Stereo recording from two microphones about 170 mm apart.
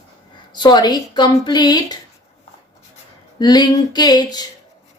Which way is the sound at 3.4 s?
25° left (ahead or behind).